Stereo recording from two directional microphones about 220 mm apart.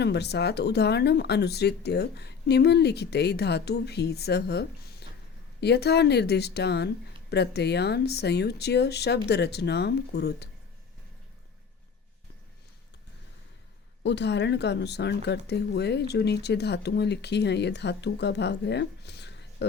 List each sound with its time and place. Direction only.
0.0 s speech: 50° left (ahead or behind)
14.0 s speech: 50° left (ahead or behind)